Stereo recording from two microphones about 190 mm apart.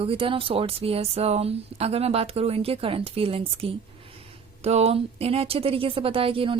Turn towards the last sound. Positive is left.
turn(degrees=-30)  # may be behind; listen again after turning